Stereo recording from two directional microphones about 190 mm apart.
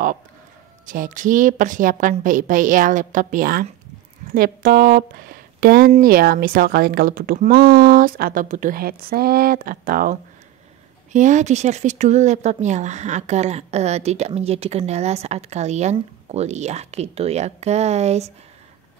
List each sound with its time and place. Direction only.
0.8 s speech: 45° right (ahead or behind)
11.1 s speech: 40° right (ahead or behind)